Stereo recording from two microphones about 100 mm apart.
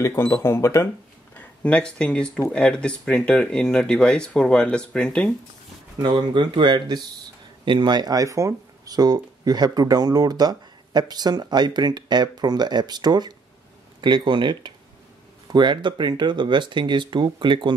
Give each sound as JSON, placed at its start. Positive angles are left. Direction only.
{"t": 0.0, "sound": "speech", "side_deg": 25}
{"t": 1.3, "sound": "speech", "side_deg": 10}
{"t": 5.9, "sound": "speech", "side_deg": -50}